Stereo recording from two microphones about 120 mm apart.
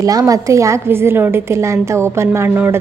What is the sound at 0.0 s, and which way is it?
A woman's voice, 30° right (ahead or behind).